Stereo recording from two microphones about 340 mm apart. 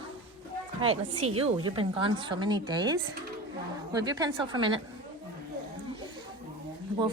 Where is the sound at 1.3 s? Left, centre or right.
Centre.